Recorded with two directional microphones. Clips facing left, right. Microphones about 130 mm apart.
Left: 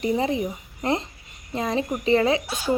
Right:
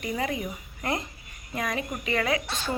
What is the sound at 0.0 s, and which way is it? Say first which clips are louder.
A woman's voice: left 7 dB; 30° left (ahead or behind).